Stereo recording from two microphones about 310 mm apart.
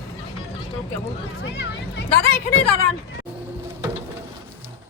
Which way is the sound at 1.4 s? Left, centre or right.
Left.